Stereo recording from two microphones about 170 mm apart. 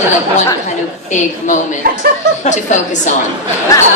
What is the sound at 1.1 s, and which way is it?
A woman's voice, 45° left (ahead or behind).